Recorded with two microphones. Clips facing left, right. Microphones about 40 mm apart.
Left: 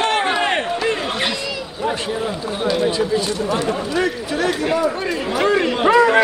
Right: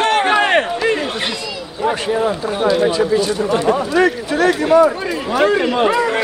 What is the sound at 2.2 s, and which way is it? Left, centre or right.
Speech, right.